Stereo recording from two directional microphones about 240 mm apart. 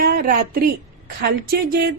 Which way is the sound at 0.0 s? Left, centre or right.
Right.